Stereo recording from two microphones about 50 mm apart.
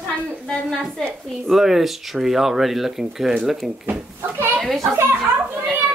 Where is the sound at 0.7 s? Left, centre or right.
Centre.